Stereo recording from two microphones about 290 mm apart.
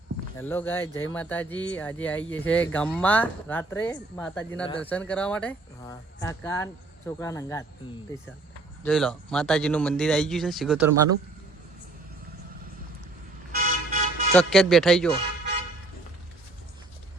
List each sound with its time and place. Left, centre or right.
0.3 s speech: centre
8.8 s speech: centre
13.6 s toot: right
14.3 s speech: centre